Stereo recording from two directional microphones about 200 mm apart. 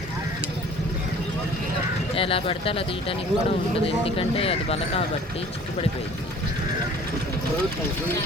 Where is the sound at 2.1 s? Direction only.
25° left (ahead or behind).